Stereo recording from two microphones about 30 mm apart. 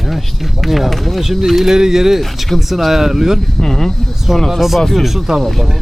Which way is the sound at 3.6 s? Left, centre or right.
Centre.